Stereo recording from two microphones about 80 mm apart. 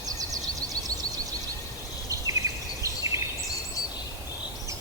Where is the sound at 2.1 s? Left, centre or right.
Right.